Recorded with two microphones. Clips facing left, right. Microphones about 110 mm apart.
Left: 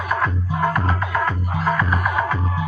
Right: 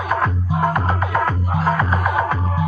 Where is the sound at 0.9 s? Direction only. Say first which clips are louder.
Right 2 dB; 35° right (ahead or behind).